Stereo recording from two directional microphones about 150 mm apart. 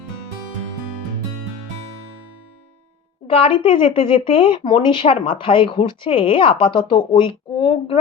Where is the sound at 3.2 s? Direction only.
35° left (ahead or behind).